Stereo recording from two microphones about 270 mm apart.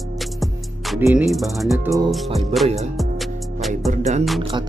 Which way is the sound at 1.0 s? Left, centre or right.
Centre.